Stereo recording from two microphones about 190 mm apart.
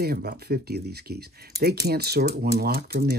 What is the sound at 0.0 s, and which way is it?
Speech, 55° right (ahead or behind).